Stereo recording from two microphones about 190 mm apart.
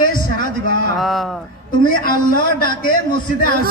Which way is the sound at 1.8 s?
50° left (ahead or behind).